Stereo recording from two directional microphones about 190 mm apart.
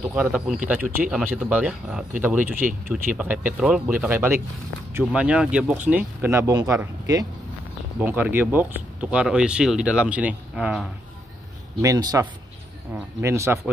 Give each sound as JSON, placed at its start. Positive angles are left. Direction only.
{"t": 0.1, "sound": "speech", "side_deg": -5}
{"t": 0.7, "sound": "speech", "side_deg": -45}
{"t": 1.1, "sound": "speech", "side_deg": -5}
{"t": 11.8, "sound": "speech", "side_deg": -20}